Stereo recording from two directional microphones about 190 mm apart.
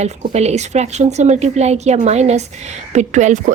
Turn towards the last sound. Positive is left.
turn(degrees=-40)  # may be behind; listen again after turning